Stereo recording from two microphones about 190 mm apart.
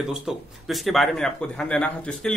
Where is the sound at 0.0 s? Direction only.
Centre (ahead or behind).